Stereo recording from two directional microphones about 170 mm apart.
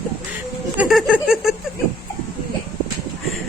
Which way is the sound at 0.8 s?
5° right (ahead or behind).